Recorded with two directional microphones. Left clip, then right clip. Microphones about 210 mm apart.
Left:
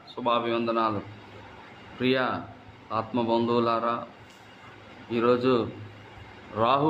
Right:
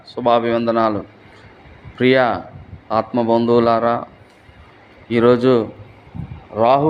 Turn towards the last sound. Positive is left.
turn(degrees=-20)  # may be behind; listen again after turning